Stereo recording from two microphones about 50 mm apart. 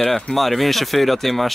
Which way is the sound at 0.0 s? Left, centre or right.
Centre.